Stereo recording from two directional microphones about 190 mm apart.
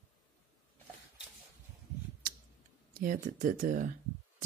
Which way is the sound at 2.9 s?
45° right (ahead or behind).